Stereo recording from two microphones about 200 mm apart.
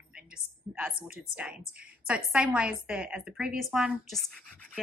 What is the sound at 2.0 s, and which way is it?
A woman's voice, 5° right (ahead or behind).